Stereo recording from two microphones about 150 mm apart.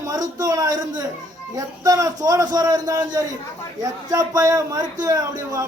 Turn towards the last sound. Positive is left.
turn(degrees=-25)  # may be behind; listen again after turning